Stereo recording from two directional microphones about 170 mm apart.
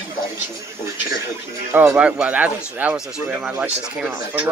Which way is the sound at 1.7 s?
10° right (ahead or behind).